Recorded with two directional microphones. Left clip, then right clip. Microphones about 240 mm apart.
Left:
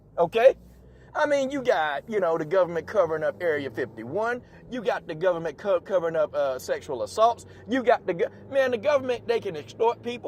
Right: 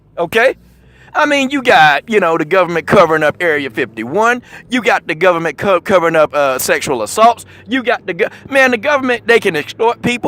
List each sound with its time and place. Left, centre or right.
0.2 s speech: right